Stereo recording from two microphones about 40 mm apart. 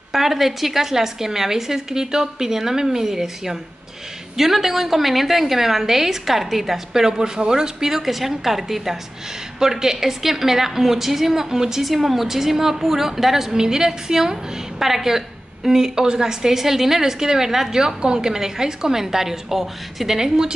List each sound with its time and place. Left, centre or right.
0.1 s a woman's voice: centre
20.2 s a woman's voice: centre